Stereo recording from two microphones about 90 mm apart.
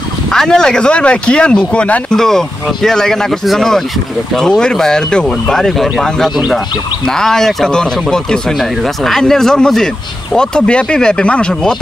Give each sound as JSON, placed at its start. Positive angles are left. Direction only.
{"t": 0.3, "sound": "speech", "side_deg": 5}